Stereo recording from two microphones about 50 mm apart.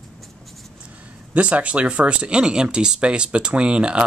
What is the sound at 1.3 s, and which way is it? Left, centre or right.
Speech, right.